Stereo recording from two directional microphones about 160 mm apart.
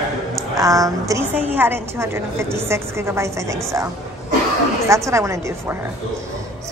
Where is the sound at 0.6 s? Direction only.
20° right (ahead or behind).